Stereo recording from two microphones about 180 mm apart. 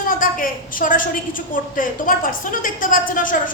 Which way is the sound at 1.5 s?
50° left (ahead or behind).